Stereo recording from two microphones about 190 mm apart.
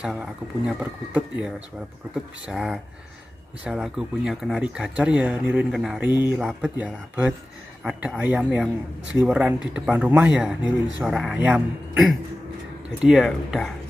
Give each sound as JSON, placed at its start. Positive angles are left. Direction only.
{"t": 0.0, "sound": "speech", "side_deg": -5}
{"t": 13.0, "sound": "speech", "side_deg": -5}